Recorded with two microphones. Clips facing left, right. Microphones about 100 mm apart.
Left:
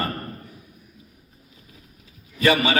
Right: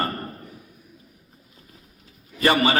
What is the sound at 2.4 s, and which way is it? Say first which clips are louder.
Speech: even; 35° right (ahead or behind).